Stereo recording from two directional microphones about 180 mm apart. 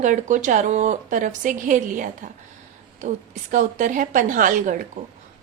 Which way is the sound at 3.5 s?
45° right (ahead or behind).